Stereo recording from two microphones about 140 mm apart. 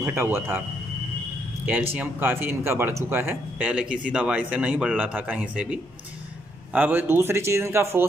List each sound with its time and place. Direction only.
0.0 s speech: 20° right (ahead or behind)
1.7 s speech: 10° right (ahead or behind)